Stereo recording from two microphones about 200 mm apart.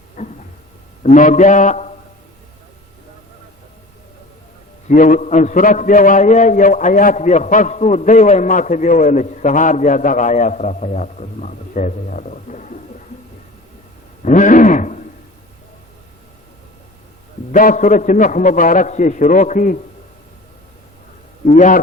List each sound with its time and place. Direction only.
0.2 s a sound: 40° left (ahead or behind)
1.0 s a man's voice: 40° left (ahead or behind)
4.9 s a man's voice: 40° left (ahead or behind)
14.2 s a sound: 40° left (ahead or behind)
17.5 s a man's voice: 45° left (ahead or behind)
21.5 s a man's voice: 40° left (ahead or behind)